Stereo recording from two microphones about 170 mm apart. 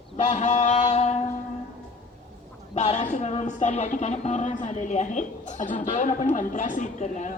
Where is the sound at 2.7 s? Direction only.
40° left (ahead or behind).